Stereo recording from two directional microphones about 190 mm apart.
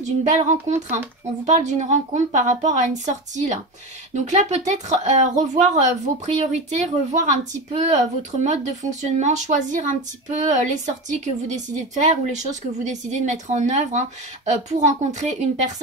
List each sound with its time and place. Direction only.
0.0 s a woman's voice: 40° right (ahead or behind)